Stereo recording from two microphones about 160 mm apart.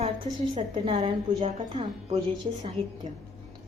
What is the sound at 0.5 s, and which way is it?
Speech, 35° right (ahead or behind).